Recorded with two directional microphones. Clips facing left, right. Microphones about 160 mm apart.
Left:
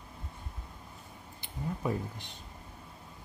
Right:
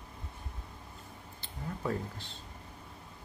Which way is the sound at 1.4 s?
15° left (ahead or behind).